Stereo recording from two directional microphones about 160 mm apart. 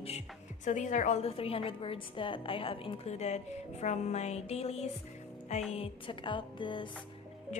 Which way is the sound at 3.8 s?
45° left (ahead or behind).